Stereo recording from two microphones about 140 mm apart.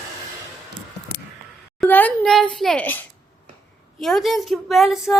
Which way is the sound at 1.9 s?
10° left (ahead or behind).